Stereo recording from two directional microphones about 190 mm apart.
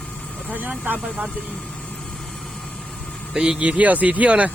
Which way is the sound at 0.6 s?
5° right (ahead or behind).